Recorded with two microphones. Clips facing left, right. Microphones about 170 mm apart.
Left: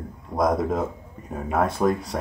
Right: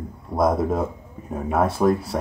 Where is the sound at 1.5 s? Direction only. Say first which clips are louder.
Right 2 dB; 5° right (ahead or behind).